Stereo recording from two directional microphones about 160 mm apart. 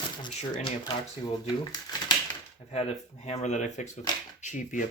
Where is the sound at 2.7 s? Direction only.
40° left (ahead or behind).